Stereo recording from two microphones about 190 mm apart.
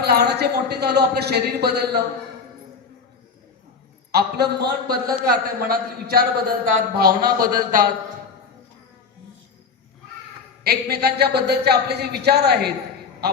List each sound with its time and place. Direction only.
0.0 s a woman's voice: 60° right (ahead or behind)
4.1 s a man's voice: 60° right (ahead or behind)
10.6 s a woman's voice: 55° right (ahead or behind)